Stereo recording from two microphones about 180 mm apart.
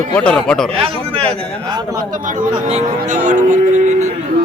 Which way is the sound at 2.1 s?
45° right (ahead or behind).